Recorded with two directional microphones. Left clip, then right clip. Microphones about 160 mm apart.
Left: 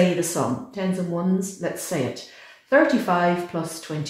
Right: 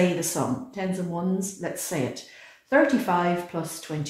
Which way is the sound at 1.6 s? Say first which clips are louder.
Left 5 dB; 35° right (ahead or behind).